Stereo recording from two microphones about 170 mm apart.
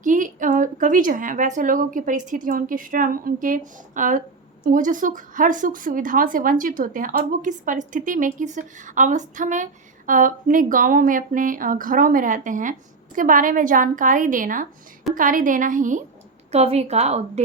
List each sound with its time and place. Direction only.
0.0 s a woman's voice: 50° right (ahead or behind)
16.5 s a woman's voice: 40° right (ahead or behind)